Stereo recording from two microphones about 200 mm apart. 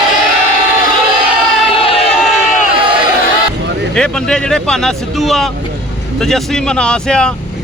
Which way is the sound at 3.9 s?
5° left (ahead or behind).